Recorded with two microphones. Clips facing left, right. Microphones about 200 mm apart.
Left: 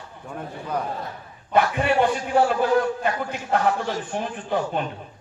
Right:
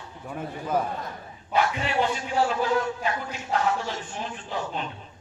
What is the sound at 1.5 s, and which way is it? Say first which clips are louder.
A man's voice: left 5 dB; 55° left (ahead or behind).